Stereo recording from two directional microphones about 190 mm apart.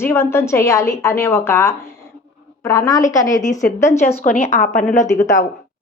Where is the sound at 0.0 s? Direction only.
15° left (ahead or behind).